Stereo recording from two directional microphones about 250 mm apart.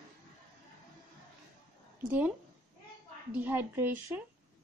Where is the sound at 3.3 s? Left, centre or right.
Centre.